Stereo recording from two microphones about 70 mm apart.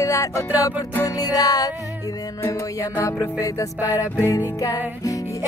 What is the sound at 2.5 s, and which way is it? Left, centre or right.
Music, left.